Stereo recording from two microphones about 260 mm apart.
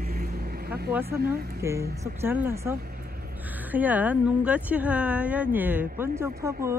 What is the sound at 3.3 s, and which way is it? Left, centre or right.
Speech, centre.